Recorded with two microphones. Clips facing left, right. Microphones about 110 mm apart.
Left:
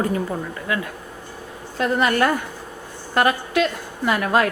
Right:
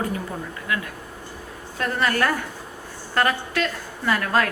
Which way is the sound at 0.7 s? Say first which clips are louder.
Left 2 dB; 30° left (ahead or behind).